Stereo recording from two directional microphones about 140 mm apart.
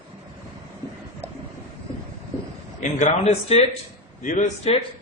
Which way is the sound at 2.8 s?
55° left (ahead or behind).